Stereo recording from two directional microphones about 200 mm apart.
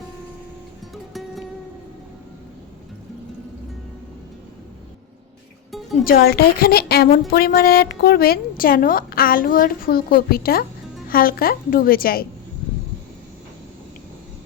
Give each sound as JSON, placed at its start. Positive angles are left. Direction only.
{"t": 6.1, "sound": "speech", "side_deg": 50}